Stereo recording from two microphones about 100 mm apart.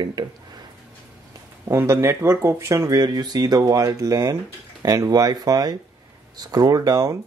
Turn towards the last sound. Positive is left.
turn(degrees=-35)  # may be behind; listen again after turning